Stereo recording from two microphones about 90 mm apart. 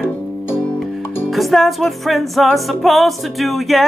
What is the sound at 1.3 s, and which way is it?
Speech, centre (ahead or behind).